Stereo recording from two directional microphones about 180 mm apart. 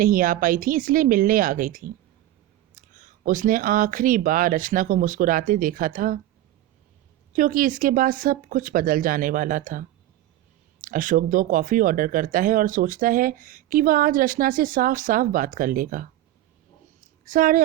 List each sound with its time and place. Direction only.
0.0 s speech: 50° right (ahead or behind)
7.3 s speech: 50° right (ahead or behind)
17.0 s a sound: 50° right (ahead or behind)